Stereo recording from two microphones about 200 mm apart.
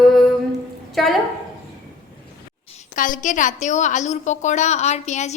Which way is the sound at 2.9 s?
40° left (ahead or behind).